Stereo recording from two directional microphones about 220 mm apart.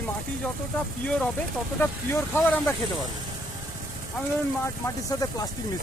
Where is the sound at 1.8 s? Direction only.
10° left (ahead or behind).